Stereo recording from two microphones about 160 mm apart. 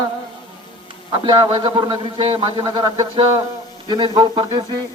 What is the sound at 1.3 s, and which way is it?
A man's voice, 25° right (ahead or behind).